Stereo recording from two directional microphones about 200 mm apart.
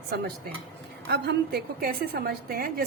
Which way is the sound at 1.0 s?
55° right (ahead or behind).